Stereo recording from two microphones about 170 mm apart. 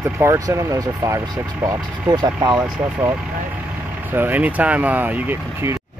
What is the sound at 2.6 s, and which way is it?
Speech, 10° right (ahead or behind).